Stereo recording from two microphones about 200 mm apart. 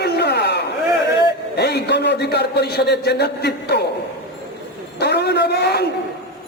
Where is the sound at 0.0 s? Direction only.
55° left (ahead or behind).